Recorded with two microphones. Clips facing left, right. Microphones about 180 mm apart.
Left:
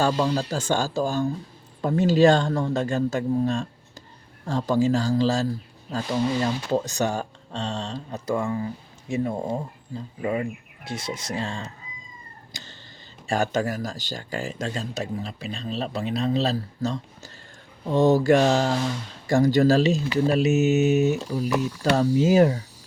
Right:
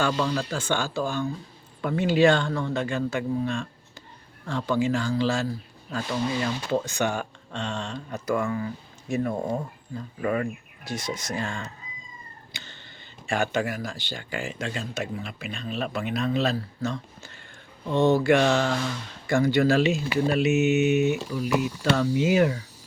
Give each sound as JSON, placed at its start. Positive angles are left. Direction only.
{"t": 0.0, "sound": "speech", "side_deg": 40}
{"t": 13.2, "sound": "speech", "side_deg": 40}